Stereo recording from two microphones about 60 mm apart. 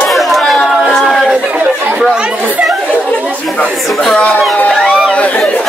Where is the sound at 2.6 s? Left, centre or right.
Right.